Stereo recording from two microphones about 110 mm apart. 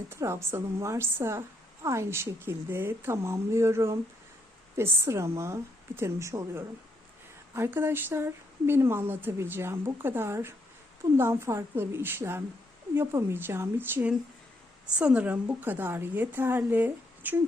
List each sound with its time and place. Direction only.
0.1 s a woman's voice: 25° right (ahead or behind)